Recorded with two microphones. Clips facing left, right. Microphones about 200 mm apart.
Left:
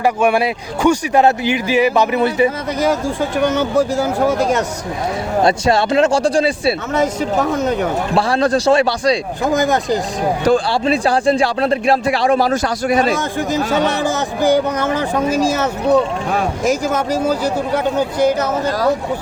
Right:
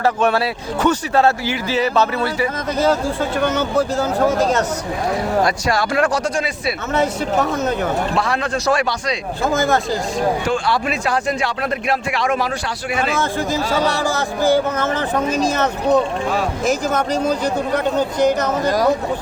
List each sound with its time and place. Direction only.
0.0 s speech: 10° left (ahead or behind)
5.4 s speech: 25° left (ahead or behind)
6.9 s speech: 10° left (ahead or behind)
8.1 s speech: 30° left (ahead or behind)
9.4 s speech: 15° left (ahead or behind)
10.4 s speech: 35° left (ahead or behind)
13.1 s speech: 20° left (ahead or behind)
18.6 s speech: 15° right (ahead or behind)